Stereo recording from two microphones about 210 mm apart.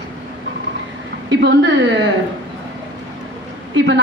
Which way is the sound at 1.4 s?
60° right (ahead or behind).